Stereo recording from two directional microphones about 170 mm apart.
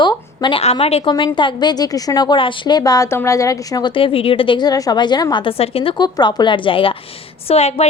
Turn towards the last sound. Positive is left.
turn(degrees=40)  # may be behind; listen again after turning